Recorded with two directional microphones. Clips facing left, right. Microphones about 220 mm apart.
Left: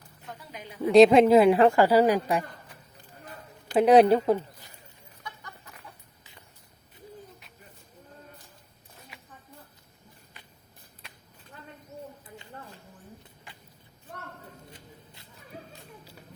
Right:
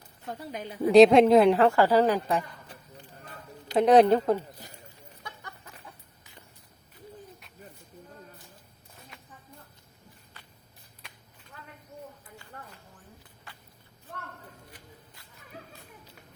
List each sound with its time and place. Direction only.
0.3 s a woman's voice: 35° right (ahead or behind)
0.9 s a woman's voice: centre (ahead or behind)
1.5 s a woman's voice: 15° left (ahead or behind)
3.8 s a woman's voice: 10° left (ahead or behind)
10.3 s walk: 15° left (ahead or behind)
11.9 s a sound: 25° left (ahead or behind)
14.7 s a sound: 25° left (ahead or behind)